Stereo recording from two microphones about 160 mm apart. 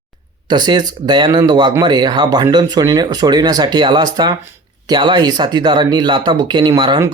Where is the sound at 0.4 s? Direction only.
25° right (ahead or behind).